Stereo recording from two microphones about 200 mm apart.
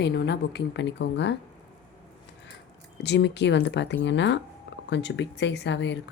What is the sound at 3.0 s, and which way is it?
Speech, 55° left (ahead or behind).